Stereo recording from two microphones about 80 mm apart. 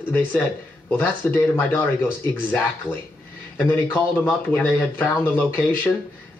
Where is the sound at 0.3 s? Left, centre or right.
Left.